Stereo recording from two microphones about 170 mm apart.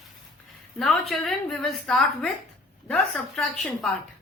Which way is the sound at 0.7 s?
5° left (ahead or behind).